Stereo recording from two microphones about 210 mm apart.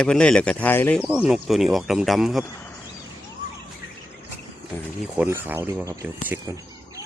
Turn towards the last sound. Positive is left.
turn(degrees=-10)  # may be behind; listen again after turning